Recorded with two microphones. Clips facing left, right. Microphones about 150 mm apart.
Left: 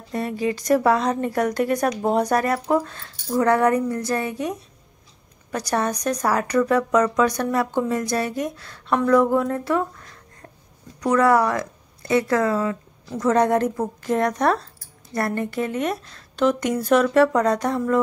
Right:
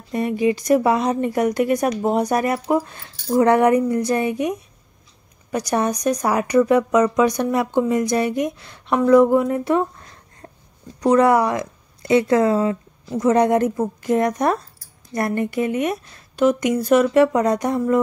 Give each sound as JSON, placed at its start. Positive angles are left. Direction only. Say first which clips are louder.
{"t": 0.1, "sound": "a woman's voice", "louder": "right 5 dB", "side_deg": -15}
{"t": 10.4, "sound": "a sound", "louder": "right 4 dB", "side_deg": -30}
{"t": 11.0, "sound": "speech", "louder": "right 3 dB", "side_deg": -20}
{"t": 13.1, "sound": "a woman's voice", "louder": "right 2 dB", "side_deg": -15}